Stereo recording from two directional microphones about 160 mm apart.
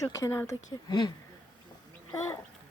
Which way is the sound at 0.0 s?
20° left (ahead or behind).